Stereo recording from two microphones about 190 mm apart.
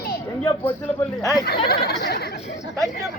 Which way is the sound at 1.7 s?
55° left (ahead or behind).